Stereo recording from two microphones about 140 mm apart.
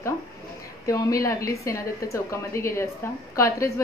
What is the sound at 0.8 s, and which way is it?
A woman's voice, 25° left (ahead or behind).